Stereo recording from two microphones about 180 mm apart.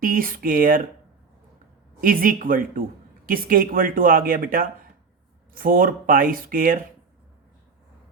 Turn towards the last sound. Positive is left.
turn(degrees=-50)  # may be behind; listen again after turning